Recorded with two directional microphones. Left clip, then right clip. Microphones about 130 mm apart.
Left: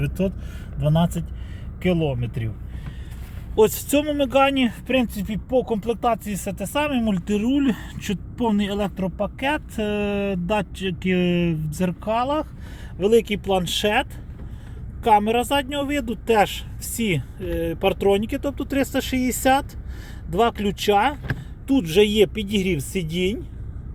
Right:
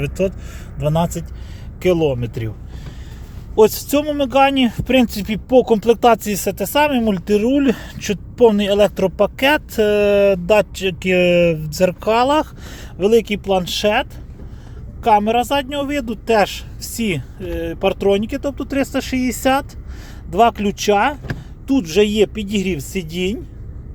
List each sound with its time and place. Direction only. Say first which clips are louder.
0.0 s speech: right 6 dB; 10° right (ahead or behind)
1.8 s speech: right 7 dB; 30° right (ahead or behind)
3.5 s speech: right 5 dB; 10° right (ahead or behind)
5.0 s speech: right 8 dB; 50° right (ahead or behind)
6.3 s speech: right 8 dB; 35° right (ahead or behind)
9.0 s speech: right 10 dB; 65° right (ahead or behind)
13.0 s speech: right 4 dB; 10° right (ahead or behind)